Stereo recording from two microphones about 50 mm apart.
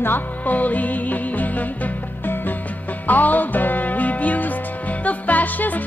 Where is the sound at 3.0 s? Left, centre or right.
Left.